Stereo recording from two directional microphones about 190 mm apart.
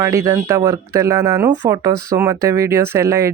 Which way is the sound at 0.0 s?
15° right (ahead or behind).